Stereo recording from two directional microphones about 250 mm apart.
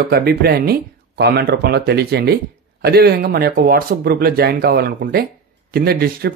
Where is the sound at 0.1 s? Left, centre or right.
Right.